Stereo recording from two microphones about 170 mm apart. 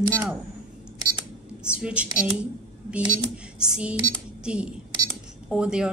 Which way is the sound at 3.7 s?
5° right (ahead or behind).